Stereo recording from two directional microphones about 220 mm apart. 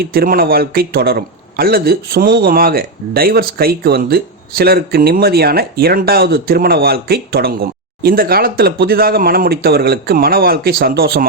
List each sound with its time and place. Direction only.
0.0 s a man's voice: 45° right (ahead or behind)